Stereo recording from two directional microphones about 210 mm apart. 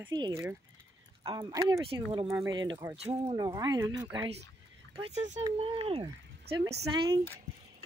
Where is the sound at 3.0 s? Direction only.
30° right (ahead or behind).